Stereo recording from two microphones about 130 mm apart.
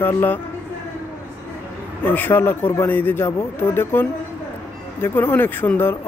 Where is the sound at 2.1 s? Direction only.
15° left (ahead or behind).